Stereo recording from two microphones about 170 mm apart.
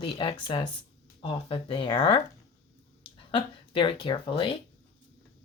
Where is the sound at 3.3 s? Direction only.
30° left (ahead or behind).